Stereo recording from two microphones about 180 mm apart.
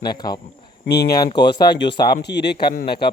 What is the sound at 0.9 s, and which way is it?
Speech, 60° left (ahead or behind).